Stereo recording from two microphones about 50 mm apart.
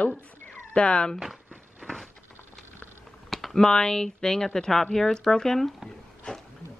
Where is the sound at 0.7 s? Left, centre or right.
Centre.